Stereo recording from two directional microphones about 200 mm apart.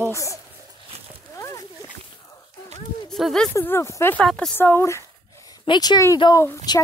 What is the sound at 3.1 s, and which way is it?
A woman's voice, centre (ahead or behind).